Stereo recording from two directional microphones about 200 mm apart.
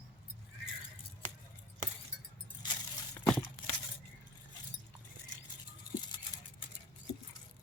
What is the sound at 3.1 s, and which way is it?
Crumpling, 5° left (ahead or behind).